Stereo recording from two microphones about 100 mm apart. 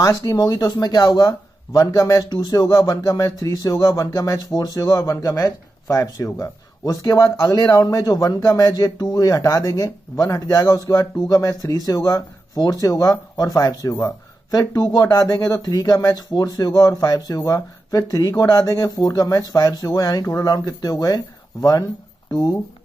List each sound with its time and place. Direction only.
0.2 s speech: 40° left (ahead or behind)
2.7 s speech: 30° left (ahead or behind)
15.3 s speech: 40° left (ahead or behind)